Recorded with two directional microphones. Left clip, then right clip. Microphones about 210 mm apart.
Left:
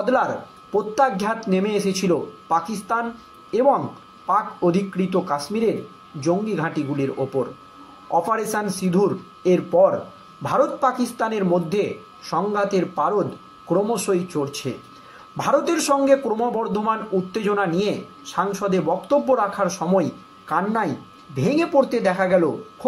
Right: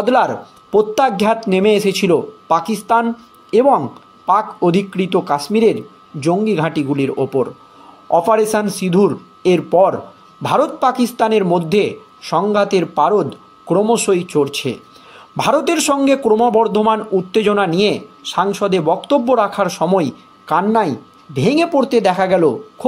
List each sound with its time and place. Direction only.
0.0 s a man's voice: 50° right (ahead or behind)